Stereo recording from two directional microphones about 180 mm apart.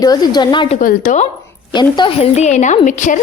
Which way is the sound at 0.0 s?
20° left (ahead or behind).